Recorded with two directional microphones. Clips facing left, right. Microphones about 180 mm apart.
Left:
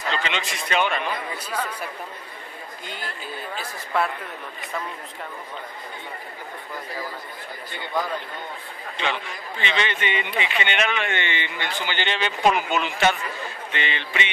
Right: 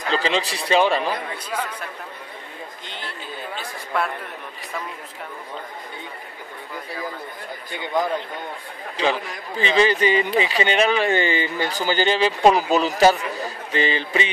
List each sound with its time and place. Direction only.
0.1 s a man's voice: 35° right (ahead or behind)
3.5 s speech: centre (ahead or behind)
7.7 s speech: 15° right (ahead or behind)
8.9 s a man's voice: 35° right (ahead or behind)